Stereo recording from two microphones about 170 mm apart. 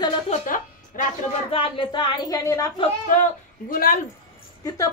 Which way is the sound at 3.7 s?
55° left (ahead or behind).